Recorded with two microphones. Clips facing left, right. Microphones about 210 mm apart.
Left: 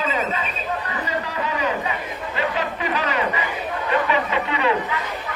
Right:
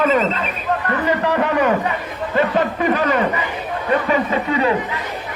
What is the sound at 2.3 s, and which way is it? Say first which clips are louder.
Speech: right 8 dB; 50° right (ahead or behind).